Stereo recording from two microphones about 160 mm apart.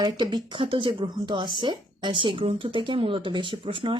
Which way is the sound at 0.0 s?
25° right (ahead or behind).